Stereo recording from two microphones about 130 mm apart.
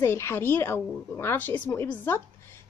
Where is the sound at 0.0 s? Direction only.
20° left (ahead or behind).